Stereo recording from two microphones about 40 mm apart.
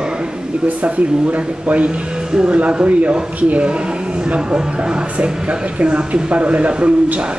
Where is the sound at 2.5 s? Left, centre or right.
Right.